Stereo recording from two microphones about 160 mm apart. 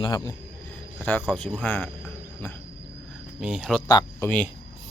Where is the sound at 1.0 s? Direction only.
10° left (ahead or behind).